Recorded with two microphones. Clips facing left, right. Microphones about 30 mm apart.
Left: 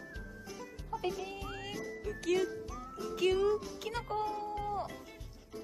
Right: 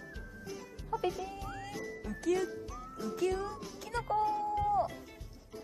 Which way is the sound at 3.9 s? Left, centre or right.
Left.